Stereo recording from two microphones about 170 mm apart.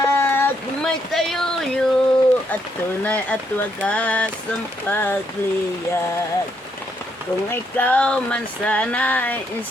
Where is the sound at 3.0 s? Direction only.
10° left (ahead or behind).